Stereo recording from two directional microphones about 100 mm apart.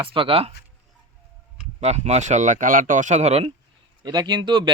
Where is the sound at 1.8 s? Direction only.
90° right.